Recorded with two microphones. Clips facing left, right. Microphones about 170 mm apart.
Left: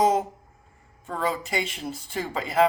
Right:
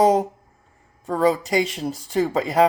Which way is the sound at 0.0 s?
35° right (ahead or behind).